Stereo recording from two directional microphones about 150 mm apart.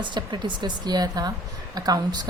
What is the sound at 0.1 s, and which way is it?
A woman's voice, 30° right (ahead or behind).